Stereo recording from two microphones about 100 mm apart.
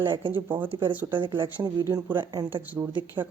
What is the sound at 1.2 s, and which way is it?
Speech, 55° right (ahead or behind).